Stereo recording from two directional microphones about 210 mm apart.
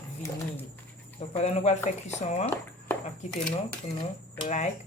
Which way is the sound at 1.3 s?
30° left (ahead or behind).